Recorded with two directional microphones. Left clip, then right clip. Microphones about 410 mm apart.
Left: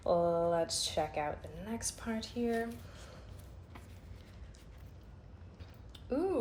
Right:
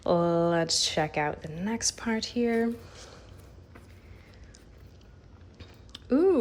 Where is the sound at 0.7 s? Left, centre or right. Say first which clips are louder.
Right 8 dB; centre.